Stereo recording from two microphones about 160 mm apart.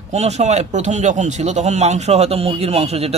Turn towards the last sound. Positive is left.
turn(degrees=-40)  # may be behind; listen again after turning